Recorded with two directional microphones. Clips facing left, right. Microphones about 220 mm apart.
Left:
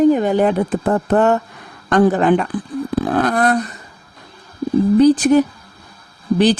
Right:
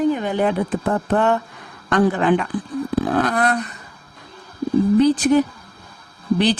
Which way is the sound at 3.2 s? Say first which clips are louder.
Left 4 dB; 40° left (ahead or behind).